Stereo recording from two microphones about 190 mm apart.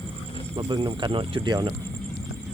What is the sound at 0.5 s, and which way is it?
Speech, 25° right (ahead or behind).